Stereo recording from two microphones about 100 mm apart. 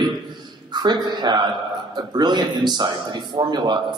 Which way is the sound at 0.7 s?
45° right (ahead or behind).